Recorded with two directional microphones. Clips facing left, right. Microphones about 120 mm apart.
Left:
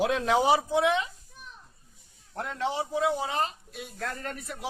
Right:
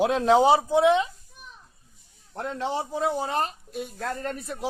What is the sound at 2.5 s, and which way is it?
Speech, 35° right (ahead or behind).